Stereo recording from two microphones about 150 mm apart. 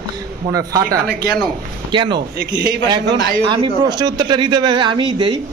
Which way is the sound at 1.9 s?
30° right (ahead or behind).